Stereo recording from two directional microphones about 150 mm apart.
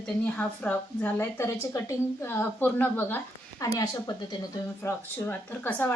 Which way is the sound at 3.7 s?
25° left (ahead or behind).